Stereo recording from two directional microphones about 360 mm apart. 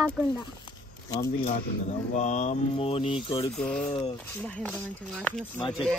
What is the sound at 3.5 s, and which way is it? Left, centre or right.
A child's voice, centre.